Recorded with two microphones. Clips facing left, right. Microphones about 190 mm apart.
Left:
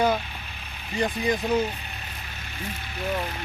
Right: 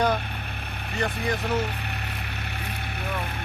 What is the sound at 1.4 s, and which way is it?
Speech, 65° right (ahead or behind).